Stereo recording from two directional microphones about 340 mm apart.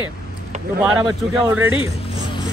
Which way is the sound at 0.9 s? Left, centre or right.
Centre.